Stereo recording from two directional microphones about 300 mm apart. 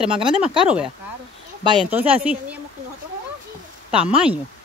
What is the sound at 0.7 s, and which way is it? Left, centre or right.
Speech, centre.